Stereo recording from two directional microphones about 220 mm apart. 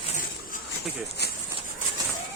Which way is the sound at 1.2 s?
50° left (ahead or behind).